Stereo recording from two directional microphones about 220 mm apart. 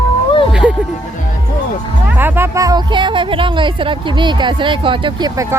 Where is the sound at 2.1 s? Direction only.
10° right (ahead or behind).